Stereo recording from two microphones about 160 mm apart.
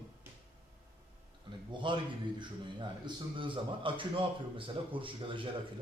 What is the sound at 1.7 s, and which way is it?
A man's voice, 30° right (ahead or behind).